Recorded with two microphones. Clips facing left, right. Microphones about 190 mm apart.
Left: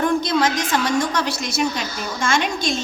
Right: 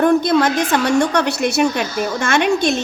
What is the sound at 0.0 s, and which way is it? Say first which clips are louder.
A woman's voice: right 5 dB; 55° right (ahead or behind).